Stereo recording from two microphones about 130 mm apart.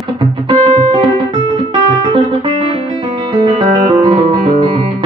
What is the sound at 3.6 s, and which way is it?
Music, 50° right (ahead or behind).